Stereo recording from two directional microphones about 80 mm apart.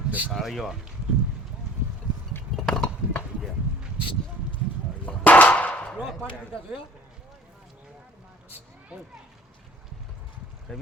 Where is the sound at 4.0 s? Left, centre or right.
Left.